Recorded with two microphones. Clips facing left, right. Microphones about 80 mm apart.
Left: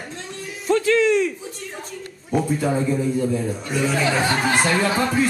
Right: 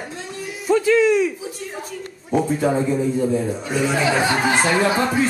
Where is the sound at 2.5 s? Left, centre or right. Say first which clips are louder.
Right 1 dB; centre.